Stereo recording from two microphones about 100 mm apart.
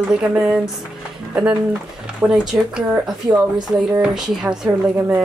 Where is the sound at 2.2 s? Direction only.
5° right (ahead or behind).